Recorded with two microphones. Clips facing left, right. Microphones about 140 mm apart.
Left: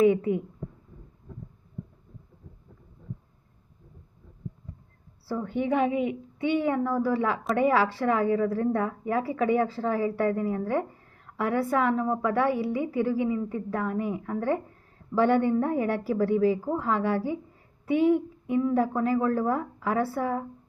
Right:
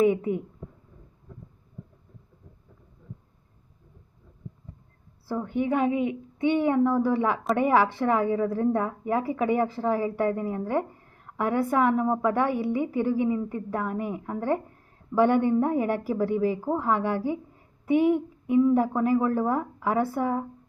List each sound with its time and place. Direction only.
0.0 s a woman's voice: 15° right (ahead or behind)
5.3 s a woman's voice: 15° right (ahead or behind)